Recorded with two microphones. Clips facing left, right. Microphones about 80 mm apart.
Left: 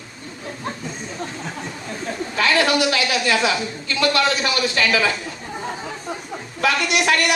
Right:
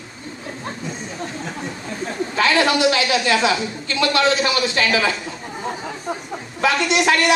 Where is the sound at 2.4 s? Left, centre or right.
Right.